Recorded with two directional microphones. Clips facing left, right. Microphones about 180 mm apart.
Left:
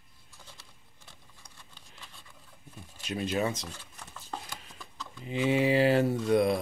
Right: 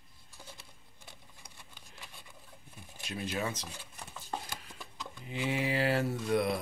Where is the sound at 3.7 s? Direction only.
15° right (ahead or behind).